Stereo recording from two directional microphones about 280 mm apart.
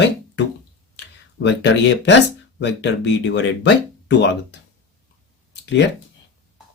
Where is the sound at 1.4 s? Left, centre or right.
Left.